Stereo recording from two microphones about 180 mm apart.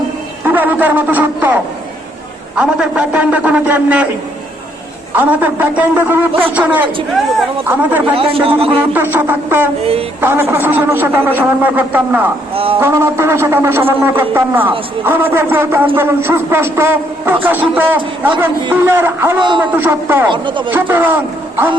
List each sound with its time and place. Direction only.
0.4 s a man's voice: 10° right (ahead or behind)
2.6 s a man's voice: 5° right (ahead or behind)
5.1 s a man's voice: 10° right (ahead or behind)
8.1 s a man's voice: 30° right (ahead or behind)
8.9 s a man's voice: 10° right (ahead or behind)
12.5 s a man's voice: 30° right (ahead or behind)
12.8 s a man's voice: 15° right (ahead or behind)
19.4 s speech: 25° right (ahead or behind)
19.7 s a man's voice: 10° right (ahead or behind)
20.3 s speech: 25° right (ahead or behind)
20.7 s a man's voice: 10° right (ahead or behind)